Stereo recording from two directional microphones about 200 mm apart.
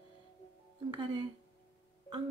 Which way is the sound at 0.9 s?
20° right (ahead or behind).